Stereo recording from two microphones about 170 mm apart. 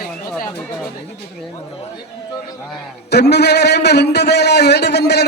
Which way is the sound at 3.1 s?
75° left (ahead or behind).